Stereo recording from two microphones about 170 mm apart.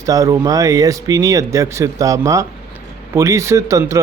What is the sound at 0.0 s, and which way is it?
A man's voice, 20° right (ahead or behind).